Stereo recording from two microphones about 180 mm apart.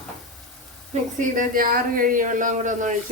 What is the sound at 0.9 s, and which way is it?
A woman's voice, 45° right (ahead or behind).